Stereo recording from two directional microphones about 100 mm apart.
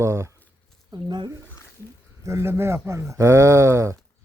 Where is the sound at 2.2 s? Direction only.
30° right (ahead or behind).